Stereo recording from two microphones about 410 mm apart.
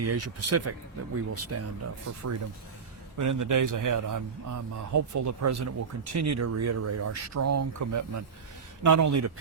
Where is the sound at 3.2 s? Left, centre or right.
Right.